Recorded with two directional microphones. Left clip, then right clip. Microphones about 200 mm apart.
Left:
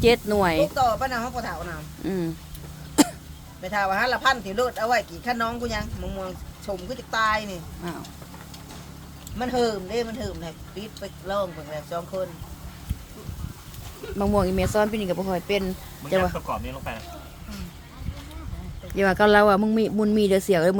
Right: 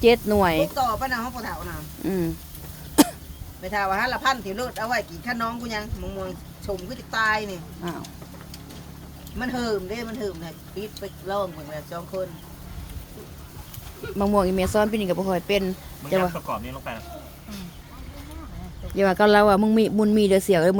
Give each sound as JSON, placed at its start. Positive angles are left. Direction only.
{"t": 0.0, "sound": "speech", "side_deg": -10}
{"t": 0.6, "sound": "speech", "side_deg": 35}
{"t": 2.0, "sound": "speech", "side_deg": -10}
{"t": 2.9, "sound": "throat clearing", "side_deg": -10}
{"t": 3.7, "sound": "speech", "side_deg": 35}
{"t": 7.8, "sound": "speech", "side_deg": -10}
{"t": 9.4, "sound": "speech", "side_deg": 35}
{"t": 11.9, "sound": "speech", "side_deg": 30}
{"t": 14.2, "sound": "speech", "side_deg": -10}
{"t": 18.9, "sound": "speech", "side_deg": -5}